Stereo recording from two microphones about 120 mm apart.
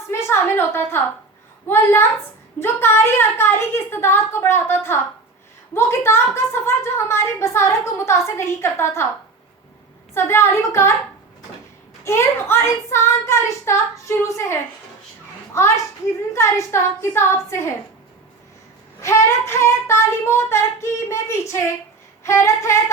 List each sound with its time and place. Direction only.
0.1 s a woman's voice: 20° left (ahead or behind)
10.2 s a woman's voice: 20° left (ahead or behind)
12.0 s a woman's voice: 20° left (ahead or behind)
19.0 s a woman's voice: 20° left (ahead or behind)